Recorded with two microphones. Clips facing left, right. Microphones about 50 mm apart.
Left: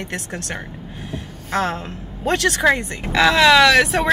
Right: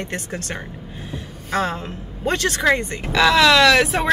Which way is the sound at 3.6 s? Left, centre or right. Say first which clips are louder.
Left 1 dB; centre.